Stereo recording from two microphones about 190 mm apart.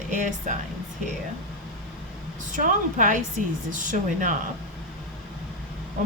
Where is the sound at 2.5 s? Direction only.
45° right (ahead or behind).